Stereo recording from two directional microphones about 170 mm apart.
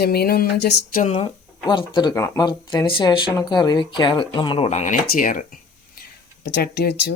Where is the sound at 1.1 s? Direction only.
30° left (ahead or behind).